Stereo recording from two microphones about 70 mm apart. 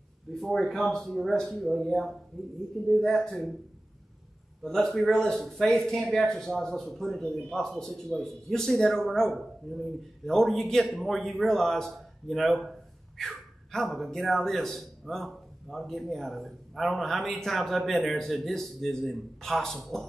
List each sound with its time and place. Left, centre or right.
0.3 s speech: centre
4.6 s speech: centre